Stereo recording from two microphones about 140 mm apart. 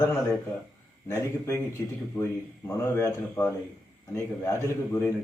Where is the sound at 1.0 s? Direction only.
15° left (ahead or behind).